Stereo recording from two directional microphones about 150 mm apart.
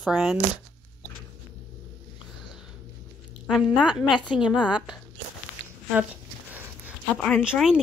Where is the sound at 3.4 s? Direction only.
Centre (ahead or behind).